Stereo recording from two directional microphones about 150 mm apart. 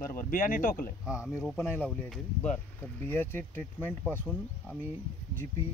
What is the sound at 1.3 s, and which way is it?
Speech, 15° left (ahead or behind).